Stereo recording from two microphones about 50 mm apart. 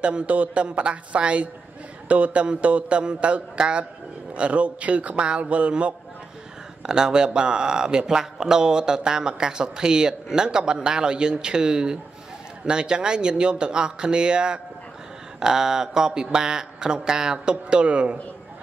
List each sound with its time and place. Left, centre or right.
0.0 s speech: right